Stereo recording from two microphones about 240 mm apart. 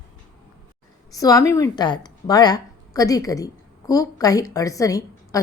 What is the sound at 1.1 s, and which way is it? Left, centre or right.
A woman's voice, centre.